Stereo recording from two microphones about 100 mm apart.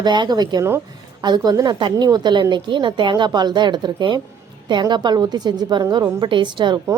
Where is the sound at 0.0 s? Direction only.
45° right (ahead or behind).